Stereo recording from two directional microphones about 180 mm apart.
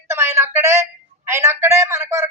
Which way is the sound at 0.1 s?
15° right (ahead or behind).